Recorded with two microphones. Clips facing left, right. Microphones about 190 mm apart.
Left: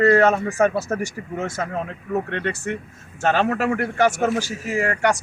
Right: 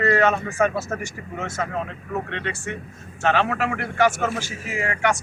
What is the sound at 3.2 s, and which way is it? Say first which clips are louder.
A man's voice: left 2 dB; 40° left (ahead or behind).